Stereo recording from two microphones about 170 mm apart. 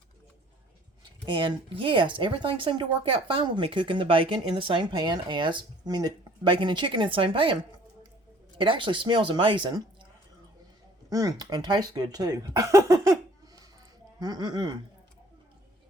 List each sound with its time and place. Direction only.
1.3 s speech: 30° right (ahead or behind)
11.1 s speech: 20° right (ahead or behind)